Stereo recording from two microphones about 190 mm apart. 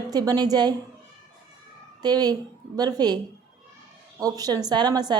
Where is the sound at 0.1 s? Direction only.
20° right (ahead or behind).